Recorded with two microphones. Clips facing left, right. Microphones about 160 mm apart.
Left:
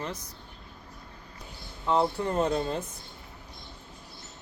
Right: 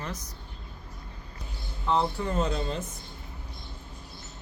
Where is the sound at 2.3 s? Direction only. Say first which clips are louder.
Left 2 dB; 55° left (ahead or behind).